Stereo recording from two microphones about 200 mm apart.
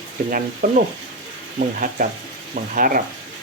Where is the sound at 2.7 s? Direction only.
45° right (ahead or behind).